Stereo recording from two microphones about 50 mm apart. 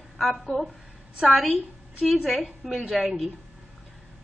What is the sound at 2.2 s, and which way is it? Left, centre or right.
Speech, centre.